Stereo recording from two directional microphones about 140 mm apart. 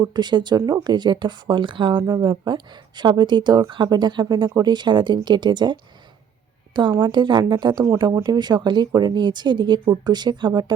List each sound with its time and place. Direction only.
0.0 s speech: 30° right (ahead or behind)
7.0 s speech: 35° right (ahead or behind)